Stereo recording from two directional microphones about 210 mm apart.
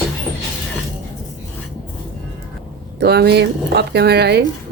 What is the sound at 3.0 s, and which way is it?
Speech, 50° right (ahead or behind).